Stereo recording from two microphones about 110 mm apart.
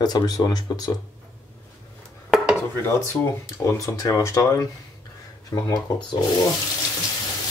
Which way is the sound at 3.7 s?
30° left (ahead or behind).